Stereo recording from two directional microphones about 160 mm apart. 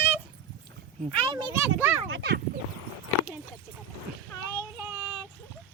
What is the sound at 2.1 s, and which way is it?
Speech, 90° right.